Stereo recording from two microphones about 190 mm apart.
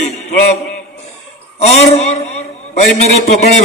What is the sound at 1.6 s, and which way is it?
A man's voice, 35° left (ahead or behind).